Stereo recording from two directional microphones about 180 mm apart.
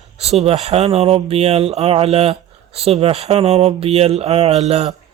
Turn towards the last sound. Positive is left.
turn(degrees=-35)  # may be behind; listen again after turning